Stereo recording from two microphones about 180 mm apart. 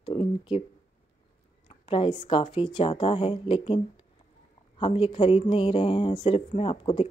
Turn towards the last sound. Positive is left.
turn(degrees=30)  # may be behind; listen again after turning